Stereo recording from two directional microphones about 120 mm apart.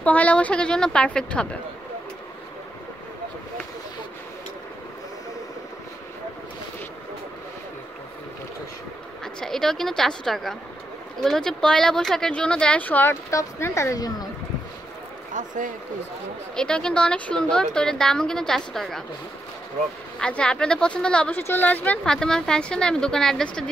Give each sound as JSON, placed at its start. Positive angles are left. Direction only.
{"t": 0.0, "sound": "speech", "side_deg": 10}
{"t": 9.2, "sound": "a woman's voice", "side_deg": 5}
{"t": 15.3, "sound": "a man's voice", "side_deg": -90}
{"t": 16.5, "sound": "a woman's voice", "side_deg": 5}
{"t": 20.2, "sound": "speech", "side_deg": 10}